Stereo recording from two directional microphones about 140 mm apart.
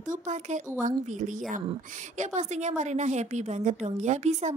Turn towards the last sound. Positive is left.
turn(degrees=-55)  # may be behind; listen again after turning